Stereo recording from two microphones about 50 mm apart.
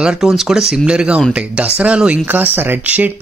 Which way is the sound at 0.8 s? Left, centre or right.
Right.